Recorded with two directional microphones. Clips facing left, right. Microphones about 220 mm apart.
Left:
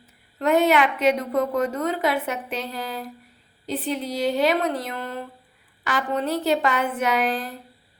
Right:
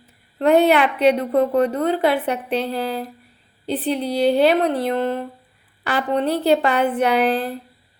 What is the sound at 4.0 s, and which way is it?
Speech, 65° right (ahead or behind).